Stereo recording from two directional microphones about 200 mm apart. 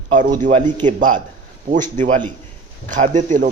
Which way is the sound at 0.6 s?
25° right (ahead or behind).